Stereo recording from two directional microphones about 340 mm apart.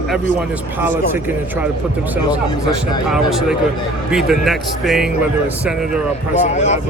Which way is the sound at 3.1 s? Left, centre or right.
Centre.